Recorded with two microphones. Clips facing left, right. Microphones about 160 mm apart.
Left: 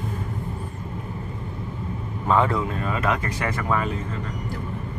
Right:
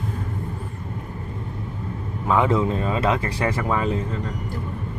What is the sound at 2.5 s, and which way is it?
Speech, 25° right (ahead or behind).